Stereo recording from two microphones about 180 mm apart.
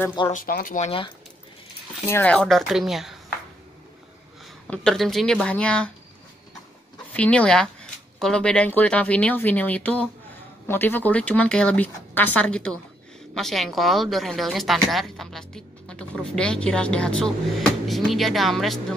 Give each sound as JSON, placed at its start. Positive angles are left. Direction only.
{"t": 0.3, "sound": "speech", "side_deg": 50}
{"t": 2.0, "sound": "a woman's voice", "side_deg": 10}
{"t": 4.6, "sound": "a woman's voice", "side_deg": 0}
{"t": 7.2, "sound": "a woman's voice", "side_deg": 5}